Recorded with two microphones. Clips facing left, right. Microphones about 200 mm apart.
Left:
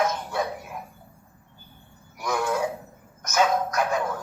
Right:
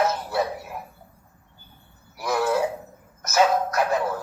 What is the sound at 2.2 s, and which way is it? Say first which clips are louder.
Music: right 3 dB; 5° right (ahead or behind).